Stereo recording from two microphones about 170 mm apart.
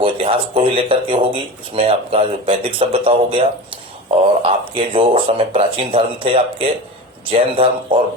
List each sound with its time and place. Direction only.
0.0 s speech: 30° right (ahead or behind)
4.4 s speech: 30° right (ahead or behind)